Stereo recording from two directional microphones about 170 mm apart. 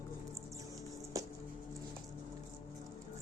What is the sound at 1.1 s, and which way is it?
Music, 20° right (ahead or behind).